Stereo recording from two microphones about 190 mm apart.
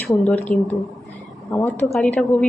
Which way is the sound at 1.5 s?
10° left (ahead or behind).